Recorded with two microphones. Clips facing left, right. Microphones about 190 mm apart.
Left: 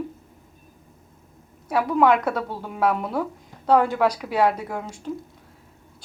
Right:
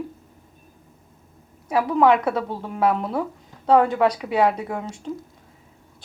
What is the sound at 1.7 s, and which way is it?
Speech, centre (ahead or behind).